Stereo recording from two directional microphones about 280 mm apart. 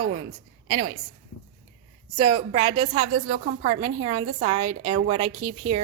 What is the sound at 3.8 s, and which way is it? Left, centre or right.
Speech, centre.